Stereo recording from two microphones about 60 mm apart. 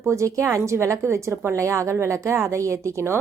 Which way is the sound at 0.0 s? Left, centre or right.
Right.